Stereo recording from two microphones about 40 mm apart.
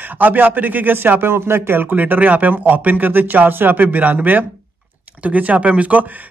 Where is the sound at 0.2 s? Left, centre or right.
Right.